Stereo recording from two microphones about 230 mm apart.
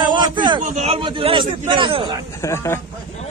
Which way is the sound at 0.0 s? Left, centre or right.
Centre.